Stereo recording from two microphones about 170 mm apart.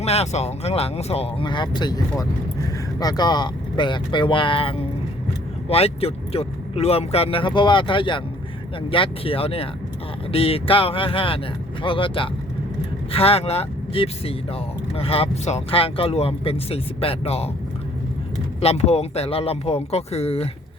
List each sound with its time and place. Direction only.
0.0 s speech: 40° left (ahead or behind)
18.6 s speech: 40° left (ahead or behind)